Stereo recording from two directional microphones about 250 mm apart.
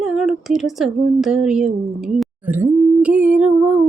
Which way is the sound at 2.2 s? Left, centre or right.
Centre.